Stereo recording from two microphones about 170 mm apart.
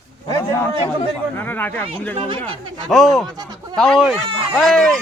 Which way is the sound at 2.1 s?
30° right (ahead or behind).